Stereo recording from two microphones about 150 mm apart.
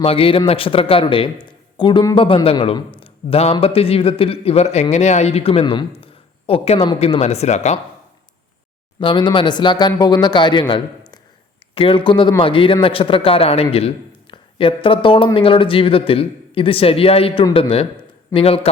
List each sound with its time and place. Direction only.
0.0 s a man's voice: 40° left (ahead or behind)
9.0 s a man's voice: 30° left (ahead or behind)